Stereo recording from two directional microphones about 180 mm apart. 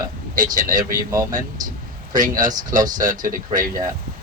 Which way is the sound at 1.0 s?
20° right (ahead or behind).